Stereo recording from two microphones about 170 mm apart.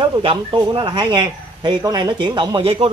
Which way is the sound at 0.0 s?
30° right (ahead or behind).